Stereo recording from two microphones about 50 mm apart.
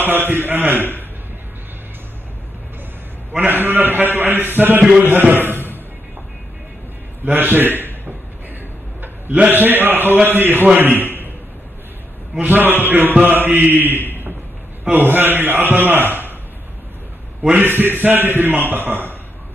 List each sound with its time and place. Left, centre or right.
0.0 s a man's voice: right
3.3 s a man's voice: right
7.2 s a man's voice: right
9.5 s a man's voice: right
12.4 s a man's voice: right
16.1 s a sound: right
17.6 s a man's voice: right